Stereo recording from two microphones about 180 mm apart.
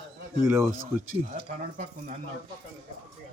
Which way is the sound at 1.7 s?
50° right (ahead or behind).